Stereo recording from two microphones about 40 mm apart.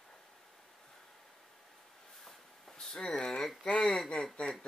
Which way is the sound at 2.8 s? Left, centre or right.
Centre.